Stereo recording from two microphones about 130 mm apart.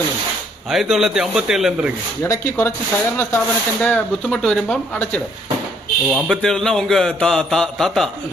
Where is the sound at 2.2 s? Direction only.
20° left (ahead or behind).